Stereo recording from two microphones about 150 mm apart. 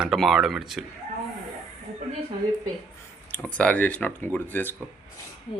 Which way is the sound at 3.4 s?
10° left (ahead or behind).